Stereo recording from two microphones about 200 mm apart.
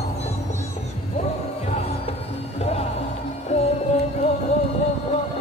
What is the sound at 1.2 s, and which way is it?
Music, 30° left (ahead or behind).